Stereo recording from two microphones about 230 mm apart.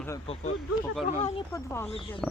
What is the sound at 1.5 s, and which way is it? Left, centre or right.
Speech, centre.